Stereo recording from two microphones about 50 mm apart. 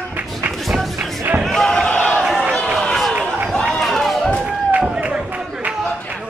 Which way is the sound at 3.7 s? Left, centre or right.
Centre.